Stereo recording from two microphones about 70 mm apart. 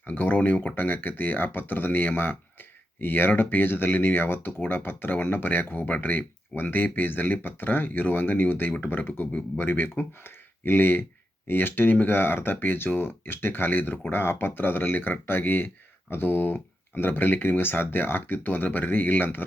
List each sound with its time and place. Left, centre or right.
0.0 s speech: left